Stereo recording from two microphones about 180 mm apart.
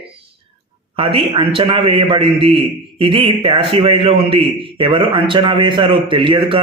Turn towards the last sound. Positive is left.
turn(degrees=-30)  # may be behind; listen again after turning